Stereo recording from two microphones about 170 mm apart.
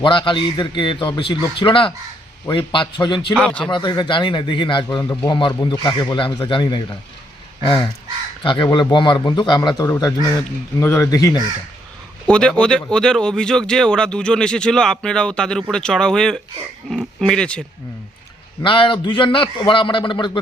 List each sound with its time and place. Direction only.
0.0 s a man's voice: 30° left (ahead or behind)
3.3 s a man's voice: 5° left (ahead or behind)
3.7 s a man's voice: 25° left (ahead or behind)
8.7 s a man's voice: 25° left (ahead or behind)
12.3 s speech: 5° left (ahead or behind)
18.6 s a man's voice: 30° left (ahead or behind)